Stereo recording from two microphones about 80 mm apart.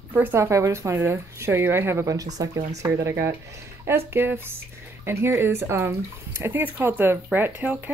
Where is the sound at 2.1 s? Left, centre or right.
Right.